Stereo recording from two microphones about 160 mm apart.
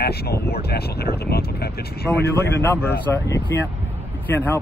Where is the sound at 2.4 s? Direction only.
15° left (ahead or behind).